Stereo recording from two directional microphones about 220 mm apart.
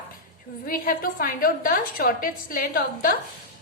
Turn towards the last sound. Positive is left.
turn(degrees=40)  # may be behind; listen again after turning